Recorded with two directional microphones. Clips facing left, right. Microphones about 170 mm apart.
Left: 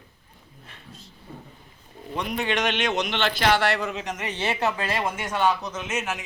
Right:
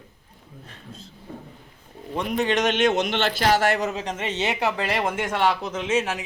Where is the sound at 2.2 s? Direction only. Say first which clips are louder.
Right 3 dB; 40° right (ahead or behind); by 4.7 s 15° right (ahead or behind).